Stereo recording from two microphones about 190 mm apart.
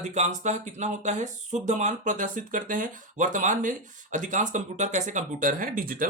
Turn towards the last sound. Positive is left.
turn(degrees=-50)  # may be behind; listen again after turning